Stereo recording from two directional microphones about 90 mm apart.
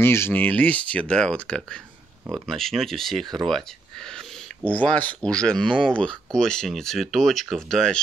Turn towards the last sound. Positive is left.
turn(degrees=5)  # may be behind; listen again after turning